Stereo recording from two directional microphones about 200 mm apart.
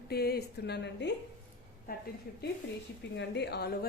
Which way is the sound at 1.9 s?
45° left (ahead or behind).